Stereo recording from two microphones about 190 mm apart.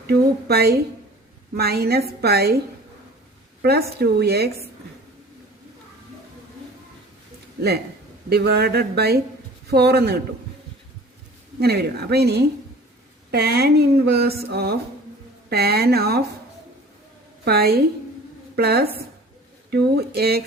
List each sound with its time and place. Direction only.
0.1 s speech: 55° right (ahead or behind)
3.6 s speech: 55° right (ahead or behind)
8.3 s speech: 55° right (ahead or behind)
11.6 s speech: 55° right (ahead or behind)
17.4 s a woman's voice: 55° right (ahead or behind)